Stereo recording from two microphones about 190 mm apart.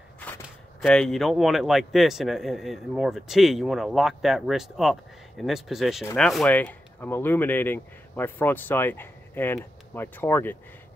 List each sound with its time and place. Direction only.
0.2 s speech: 5° left (ahead or behind)